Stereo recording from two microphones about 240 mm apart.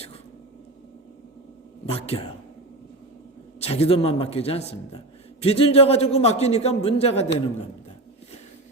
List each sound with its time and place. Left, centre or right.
1.9 s a man's voice: left
3.6 s a man's voice: left